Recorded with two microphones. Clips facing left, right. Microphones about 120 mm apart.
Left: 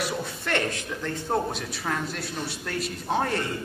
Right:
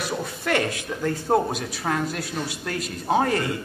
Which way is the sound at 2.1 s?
Centre (ahead or behind).